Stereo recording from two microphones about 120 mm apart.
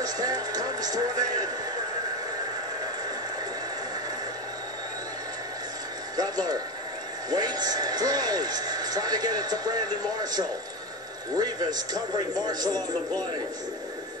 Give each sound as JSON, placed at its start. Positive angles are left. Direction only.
{"t": 0.0, "sound": "music", "side_deg": -30}
{"t": 6.1, "sound": "speech", "side_deg": -30}